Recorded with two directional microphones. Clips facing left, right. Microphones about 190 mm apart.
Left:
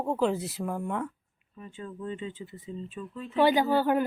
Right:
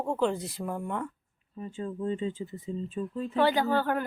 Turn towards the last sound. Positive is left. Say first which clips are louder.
# left 3 dB
turn(degrees=15)  # may be behind; listen again after turning